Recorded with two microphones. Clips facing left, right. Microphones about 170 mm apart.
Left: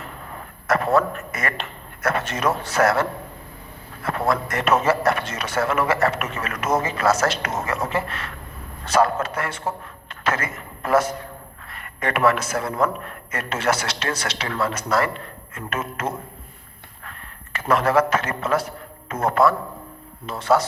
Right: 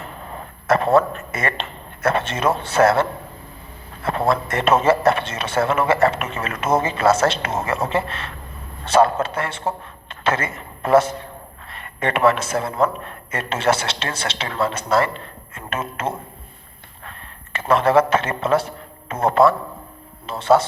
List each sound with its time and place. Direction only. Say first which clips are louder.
0.0 s a man's voice: right 3 dB; 25° right (ahead or behind)